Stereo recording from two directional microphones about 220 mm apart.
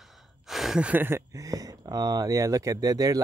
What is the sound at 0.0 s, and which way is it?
Speech, centre (ahead or behind).